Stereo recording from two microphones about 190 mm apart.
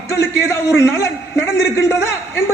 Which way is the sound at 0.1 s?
15° left (ahead or behind).